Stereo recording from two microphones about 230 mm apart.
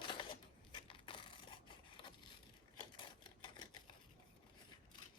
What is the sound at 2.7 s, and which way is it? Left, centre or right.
Typewriter, centre.